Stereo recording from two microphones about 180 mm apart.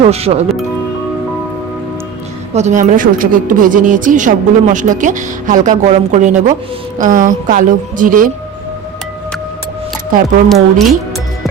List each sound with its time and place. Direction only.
0.0 s speech: 35° right (ahead or behind)
2.5 s speech: 40° right (ahead or behind)
10.5 s speech: centre (ahead or behind)